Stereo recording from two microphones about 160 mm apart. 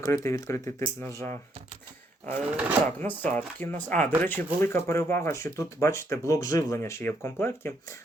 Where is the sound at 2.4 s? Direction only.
10° right (ahead or behind).